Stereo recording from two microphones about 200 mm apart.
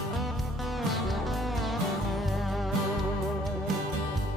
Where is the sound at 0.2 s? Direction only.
Centre (ahead or behind).